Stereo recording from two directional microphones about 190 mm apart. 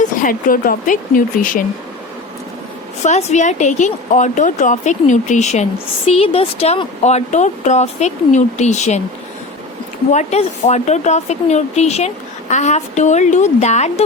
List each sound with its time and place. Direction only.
0.0 s speech: 45° left (ahead or behind)
3.0 s speech: 35° left (ahead or behind)
10.1 s speech: 40° left (ahead or behind)